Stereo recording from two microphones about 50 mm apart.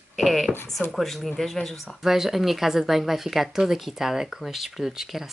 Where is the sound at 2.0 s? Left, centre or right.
Centre.